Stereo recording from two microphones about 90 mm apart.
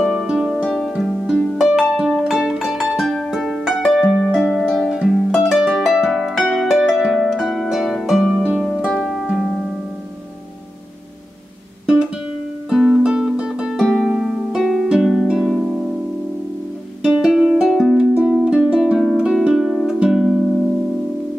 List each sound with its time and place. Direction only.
0.1 s music: 5° right (ahead or behind)
4.5 s harp: 5° left (ahead or behind)
8.5 s music: 10° left (ahead or behind)
11.8 s music: 10° right (ahead or behind)
13.8 s harp: centre (ahead or behind)
17.0 s music: 5° right (ahead or behind)